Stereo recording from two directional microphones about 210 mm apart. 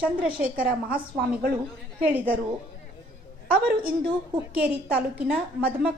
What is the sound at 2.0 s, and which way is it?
Speech, 10° right (ahead or behind).